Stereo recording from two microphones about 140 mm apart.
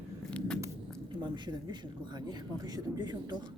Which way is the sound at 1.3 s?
30° right (ahead or behind).